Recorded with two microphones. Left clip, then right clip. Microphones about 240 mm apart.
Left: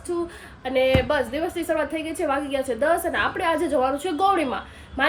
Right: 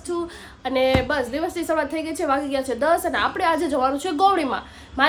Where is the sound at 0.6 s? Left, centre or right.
Centre.